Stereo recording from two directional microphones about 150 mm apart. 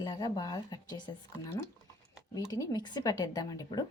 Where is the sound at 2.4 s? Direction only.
25° left (ahead or behind).